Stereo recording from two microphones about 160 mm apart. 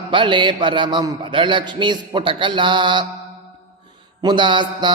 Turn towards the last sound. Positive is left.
turn(degrees=-30)  # may be behind; listen again after turning